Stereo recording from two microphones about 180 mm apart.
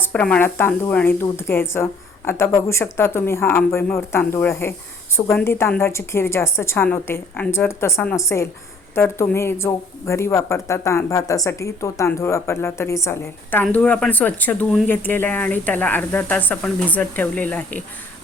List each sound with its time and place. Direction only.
0.0 s speech: 5° left (ahead or behind)